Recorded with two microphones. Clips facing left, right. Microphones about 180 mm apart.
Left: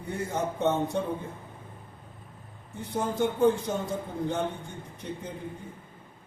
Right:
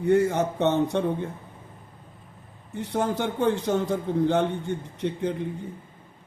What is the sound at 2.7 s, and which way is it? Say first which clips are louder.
A man's voice: right 3 dB; 75° right (ahead or behind).